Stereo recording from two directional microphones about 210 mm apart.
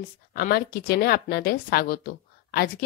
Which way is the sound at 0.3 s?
45° left (ahead or behind).